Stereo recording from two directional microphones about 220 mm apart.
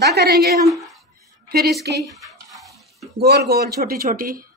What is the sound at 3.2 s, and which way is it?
A man's voice, 45° right (ahead or behind).